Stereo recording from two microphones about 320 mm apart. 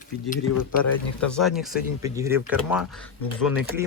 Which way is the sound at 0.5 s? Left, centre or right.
Left.